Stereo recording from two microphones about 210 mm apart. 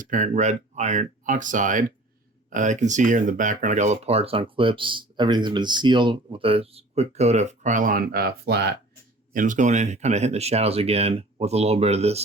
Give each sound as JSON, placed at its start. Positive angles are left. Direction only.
{"t": 0.0, "sound": "speech", "side_deg": -35}
{"t": 9.3, "sound": "speech", "side_deg": -40}